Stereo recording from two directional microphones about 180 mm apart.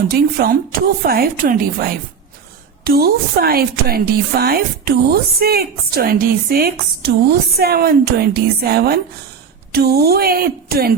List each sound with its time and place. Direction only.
0.1 s a woman's voice: 55° right (ahead or behind)